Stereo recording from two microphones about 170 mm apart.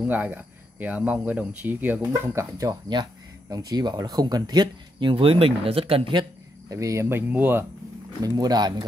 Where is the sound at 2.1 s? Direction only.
20° right (ahead or behind).